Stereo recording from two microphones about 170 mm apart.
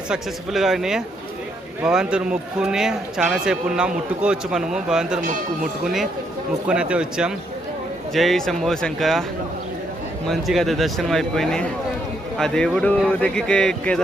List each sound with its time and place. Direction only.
0.1 s a man's voice: centre (ahead or behind)
10.2 s a man's voice: centre (ahead or behind)